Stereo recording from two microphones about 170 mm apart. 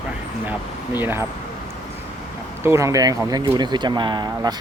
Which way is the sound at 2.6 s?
15° right (ahead or behind).